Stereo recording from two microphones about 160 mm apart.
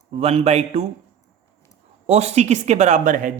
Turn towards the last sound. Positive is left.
turn(degrees=-55)  # may be behind; listen again after turning